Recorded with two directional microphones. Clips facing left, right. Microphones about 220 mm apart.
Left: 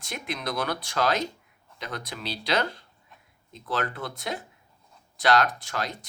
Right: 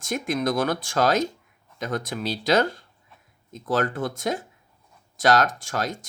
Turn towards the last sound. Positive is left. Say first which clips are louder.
# right 4 dB
turn(degrees=-45)  # may be behind; listen again after turning